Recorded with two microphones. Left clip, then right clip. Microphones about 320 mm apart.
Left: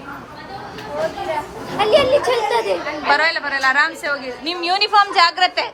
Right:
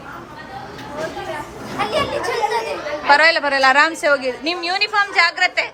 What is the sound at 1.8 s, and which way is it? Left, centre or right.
Speech, centre.